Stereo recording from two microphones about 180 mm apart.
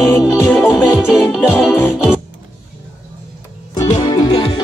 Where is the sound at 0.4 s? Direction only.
5° right (ahead or behind).